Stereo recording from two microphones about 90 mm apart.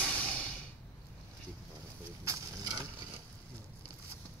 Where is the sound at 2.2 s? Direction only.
40° right (ahead or behind).